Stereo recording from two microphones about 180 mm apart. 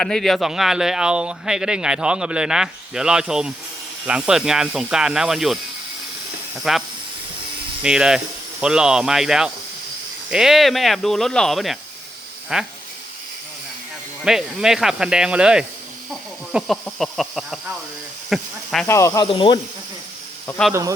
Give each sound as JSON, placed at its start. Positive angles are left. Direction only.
{"t": 0.0, "sound": "speech", "side_deg": 5}
{"t": 6.6, "sound": "speech", "side_deg": 0}
{"t": 14.2, "sound": "speech", "side_deg": -5}
{"t": 18.9, "sound": "speech", "side_deg": 15}
{"t": 19.3, "sound": "speech", "side_deg": 30}
{"t": 20.5, "sound": "speech", "side_deg": 5}